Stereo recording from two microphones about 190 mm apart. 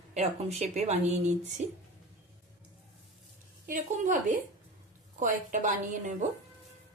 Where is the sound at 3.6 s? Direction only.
45° right (ahead or behind).